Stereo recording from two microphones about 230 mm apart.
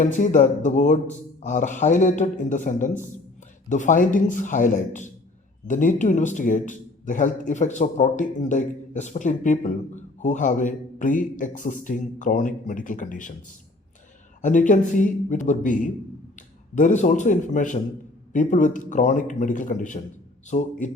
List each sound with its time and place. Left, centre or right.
0.0 s a man's voice: left
14.4 s a man's voice: left